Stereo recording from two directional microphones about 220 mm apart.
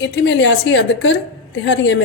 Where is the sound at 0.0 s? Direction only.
55° left (ahead or behind).